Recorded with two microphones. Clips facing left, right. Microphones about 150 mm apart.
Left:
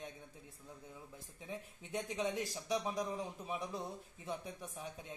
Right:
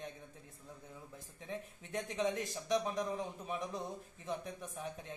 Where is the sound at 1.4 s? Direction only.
5° left (ahead or behind).